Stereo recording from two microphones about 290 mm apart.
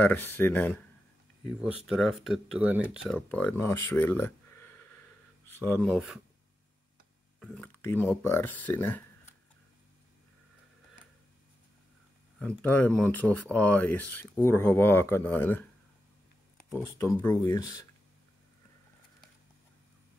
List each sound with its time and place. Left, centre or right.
0.0 s speech: centre
7.3 s speech: centre
12.4 s speech: centre
16.7 s speech: centre